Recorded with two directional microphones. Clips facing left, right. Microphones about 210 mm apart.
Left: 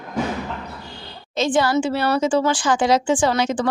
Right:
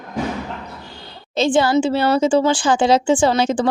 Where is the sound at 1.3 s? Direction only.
30° right (ahead or behind).